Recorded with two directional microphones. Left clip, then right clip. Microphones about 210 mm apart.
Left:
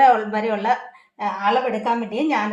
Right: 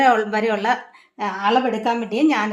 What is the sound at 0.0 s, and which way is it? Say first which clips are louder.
A woman's voice: left 1 dB; 50° right (ahead or behind).